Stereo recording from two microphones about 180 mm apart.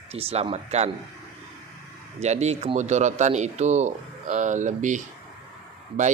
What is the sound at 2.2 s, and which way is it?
Speech, 40° right (ahead or behind).